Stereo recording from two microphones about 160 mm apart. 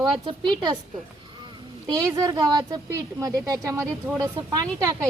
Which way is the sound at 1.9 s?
20° right (ahead or behind).